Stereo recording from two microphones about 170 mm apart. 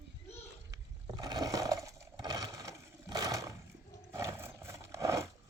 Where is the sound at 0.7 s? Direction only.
25° right (ahead or behind).